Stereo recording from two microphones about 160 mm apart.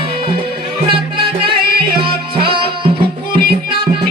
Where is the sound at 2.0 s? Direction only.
30° right (ahead or behind).